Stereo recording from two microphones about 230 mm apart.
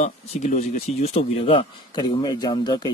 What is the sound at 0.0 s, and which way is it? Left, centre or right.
Speech, left.